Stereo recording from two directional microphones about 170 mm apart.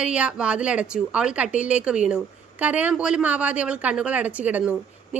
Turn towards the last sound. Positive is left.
turn(degrees=-10)  # may be behind; listen again after turning